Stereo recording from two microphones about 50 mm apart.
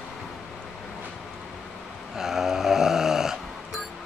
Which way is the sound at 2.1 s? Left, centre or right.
Centre.